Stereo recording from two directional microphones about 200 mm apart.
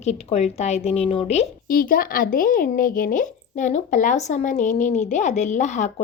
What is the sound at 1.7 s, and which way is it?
A woman's voice, 45° left (ahead or behind).